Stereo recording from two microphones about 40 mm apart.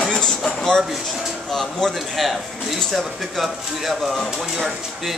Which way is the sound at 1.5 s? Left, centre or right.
Centre.